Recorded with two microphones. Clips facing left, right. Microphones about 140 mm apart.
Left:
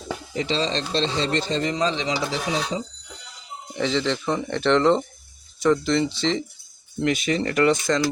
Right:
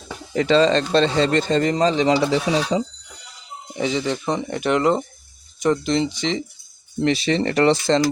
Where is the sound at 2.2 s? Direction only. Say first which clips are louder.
Right 7 dB; 65° right (ahead or behind).